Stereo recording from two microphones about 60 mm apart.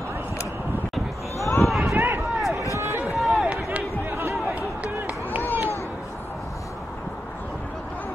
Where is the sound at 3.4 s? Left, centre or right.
Right.